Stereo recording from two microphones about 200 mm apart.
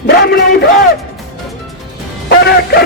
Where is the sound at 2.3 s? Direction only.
50° left (ahead or behind).